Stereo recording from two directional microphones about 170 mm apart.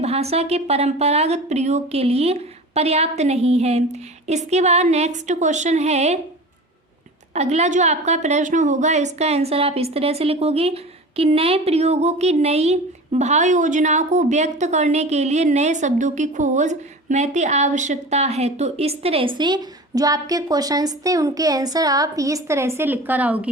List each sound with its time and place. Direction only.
0.0 s a woman's voice: 40° right (ahead or behind)
7.3 s a woman's voice: 40° right (ahead or behind); by 23.5 s 10° right (ahead or behind)